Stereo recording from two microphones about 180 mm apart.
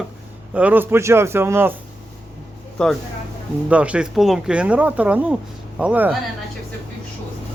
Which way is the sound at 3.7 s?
5° right (ahead or behind).